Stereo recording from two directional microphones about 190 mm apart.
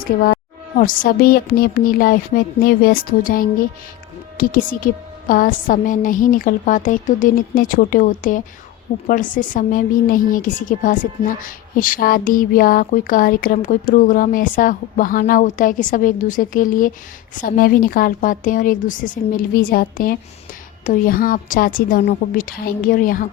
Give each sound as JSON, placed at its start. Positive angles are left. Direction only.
{"t": 0.8, "sound": "a woman's voice", "side_deg": 45}